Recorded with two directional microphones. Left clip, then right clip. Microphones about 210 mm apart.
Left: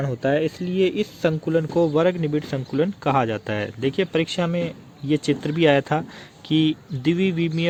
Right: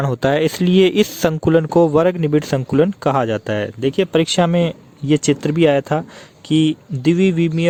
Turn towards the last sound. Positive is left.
turn(degrees=-30)  # may be behind; listen again after turning